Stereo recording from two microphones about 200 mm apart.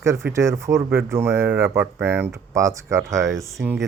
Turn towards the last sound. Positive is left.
turn(degrees=0)  # may be behind; listen again after turning